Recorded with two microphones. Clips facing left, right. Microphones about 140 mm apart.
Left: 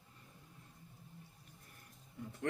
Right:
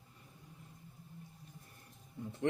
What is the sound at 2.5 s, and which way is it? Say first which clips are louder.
Speech: right 4 dB; 20° right (ahead or behind).